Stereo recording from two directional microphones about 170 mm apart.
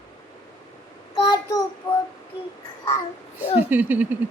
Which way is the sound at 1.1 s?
25° left (ahead or behind).